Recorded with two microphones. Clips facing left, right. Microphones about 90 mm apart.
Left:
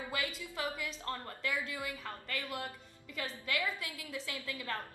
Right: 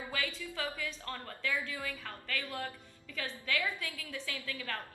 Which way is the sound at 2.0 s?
30° left (ahead or behind).